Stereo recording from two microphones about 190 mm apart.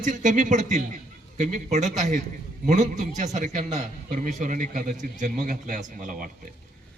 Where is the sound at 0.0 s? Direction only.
40° right (ahead or behind).